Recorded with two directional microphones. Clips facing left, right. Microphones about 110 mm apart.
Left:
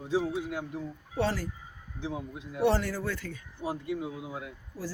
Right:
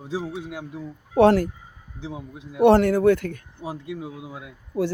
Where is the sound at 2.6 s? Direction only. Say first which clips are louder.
Right 12 dB; 60° right (ahead or behind).